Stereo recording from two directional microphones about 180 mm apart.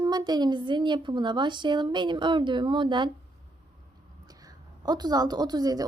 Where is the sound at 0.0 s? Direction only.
20° right (ahead or behind).